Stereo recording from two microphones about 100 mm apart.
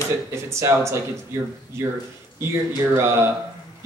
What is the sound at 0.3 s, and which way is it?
Speech, 30° right (ahead or behind).